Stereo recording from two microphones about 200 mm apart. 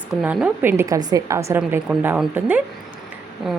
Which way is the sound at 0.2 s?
5° right (ahead or behind).